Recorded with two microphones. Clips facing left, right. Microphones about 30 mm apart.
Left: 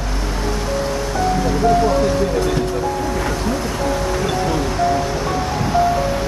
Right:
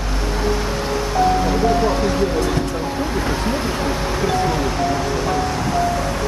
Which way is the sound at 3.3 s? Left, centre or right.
Right.